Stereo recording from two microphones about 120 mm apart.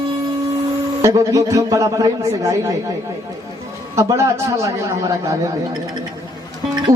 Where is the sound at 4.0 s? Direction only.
25° right (ahead or behind).